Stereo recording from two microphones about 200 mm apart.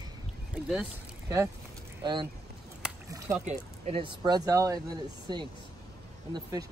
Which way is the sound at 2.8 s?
5° right (ahead or behind).